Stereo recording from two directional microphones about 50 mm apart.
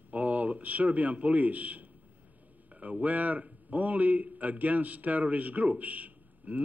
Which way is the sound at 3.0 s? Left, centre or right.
Right.